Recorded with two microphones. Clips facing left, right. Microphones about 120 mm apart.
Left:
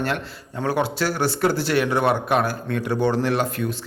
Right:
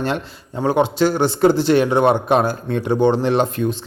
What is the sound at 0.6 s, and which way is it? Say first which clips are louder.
A man's voice: right 6 dB; 20° right (ahead or behind).